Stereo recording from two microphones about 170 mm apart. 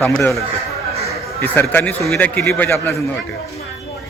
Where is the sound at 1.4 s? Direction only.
10° left (ahead or behind).